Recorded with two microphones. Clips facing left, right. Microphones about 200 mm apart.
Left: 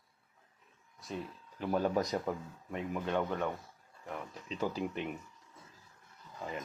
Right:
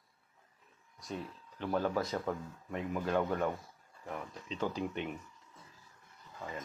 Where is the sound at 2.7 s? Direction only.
Centre (ahead or behind).